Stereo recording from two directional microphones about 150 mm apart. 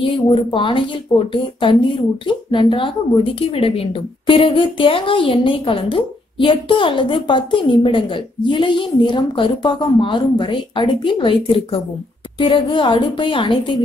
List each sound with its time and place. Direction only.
0.0 s a woman's voice: 35° left (ahead or behind)